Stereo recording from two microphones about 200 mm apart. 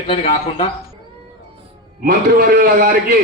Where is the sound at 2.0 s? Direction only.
50° right (ahead or behind).